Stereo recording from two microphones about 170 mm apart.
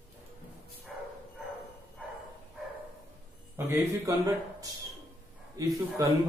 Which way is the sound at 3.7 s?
15° right (ahead or behind).